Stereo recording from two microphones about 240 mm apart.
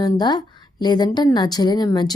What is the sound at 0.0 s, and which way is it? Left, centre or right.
A woman's voice, centre.